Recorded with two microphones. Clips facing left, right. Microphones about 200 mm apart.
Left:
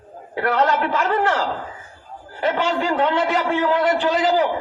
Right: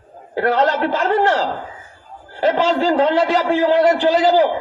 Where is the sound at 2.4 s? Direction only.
35° right (ahead or behind).